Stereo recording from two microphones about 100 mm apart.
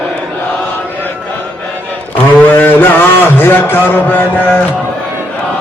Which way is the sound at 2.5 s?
20° left (ahead or behind).